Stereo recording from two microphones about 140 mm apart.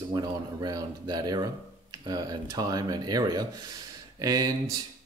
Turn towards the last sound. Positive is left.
turn(degrees=-25)  # may be behind; listen again after turning